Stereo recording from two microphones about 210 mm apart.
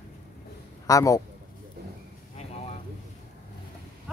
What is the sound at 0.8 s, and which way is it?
Speech, 15° left (ahead or behind).